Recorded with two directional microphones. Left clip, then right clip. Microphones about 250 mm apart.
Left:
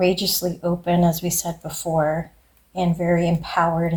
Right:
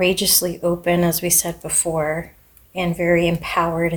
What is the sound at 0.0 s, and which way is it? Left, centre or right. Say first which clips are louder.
Speech: right 2 dB; right.